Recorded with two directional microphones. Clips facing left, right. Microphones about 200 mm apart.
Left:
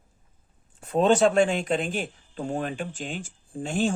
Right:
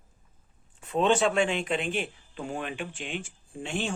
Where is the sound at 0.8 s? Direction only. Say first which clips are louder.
Left 4 dB; 40° left (ahead or behind).